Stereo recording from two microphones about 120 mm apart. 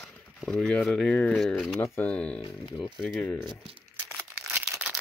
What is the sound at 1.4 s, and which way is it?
Speech, 5° left (ahead or behind).